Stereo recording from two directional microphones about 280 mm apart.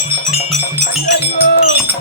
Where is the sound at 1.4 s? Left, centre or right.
Left.